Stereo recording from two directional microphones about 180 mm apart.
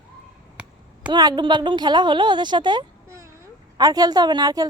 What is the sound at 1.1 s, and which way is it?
Speech, 25° right (ahead or behind).